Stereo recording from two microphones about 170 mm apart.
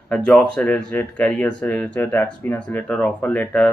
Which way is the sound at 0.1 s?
5° left (ahead or behind).